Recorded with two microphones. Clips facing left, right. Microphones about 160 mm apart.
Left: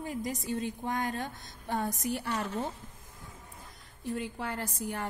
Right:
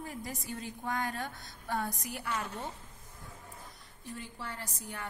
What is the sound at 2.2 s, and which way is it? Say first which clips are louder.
Speech: left 3 dB; 35° left (ahead or behind).